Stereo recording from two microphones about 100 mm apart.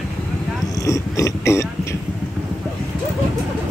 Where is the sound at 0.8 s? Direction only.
30° left (ahead or behind).